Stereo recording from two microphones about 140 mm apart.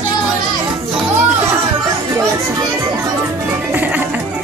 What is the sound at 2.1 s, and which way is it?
Children playing, 20° right (ahead or behind).